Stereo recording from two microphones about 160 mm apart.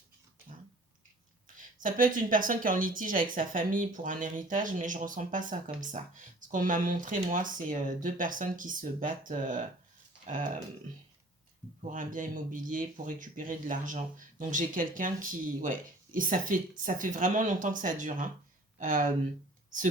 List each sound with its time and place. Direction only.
1.8 s speech: 55° right (ahead or behind)
11.8 s speech: 50° right (ahead or behind)